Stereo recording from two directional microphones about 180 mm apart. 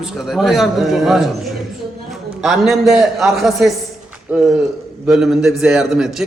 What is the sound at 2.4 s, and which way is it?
A man's voice, centre (ahead or behind).